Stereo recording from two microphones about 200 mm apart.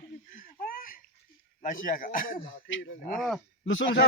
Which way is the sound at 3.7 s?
70° left (ahead or behind).